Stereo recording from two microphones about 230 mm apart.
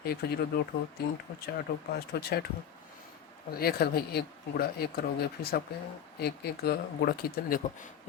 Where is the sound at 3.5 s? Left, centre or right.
Left.